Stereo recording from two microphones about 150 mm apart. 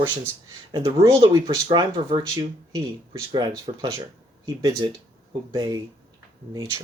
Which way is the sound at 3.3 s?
30° right (ahead or behind).